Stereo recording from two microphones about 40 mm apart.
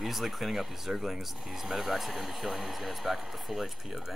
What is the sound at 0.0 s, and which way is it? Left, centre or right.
Speech, centre.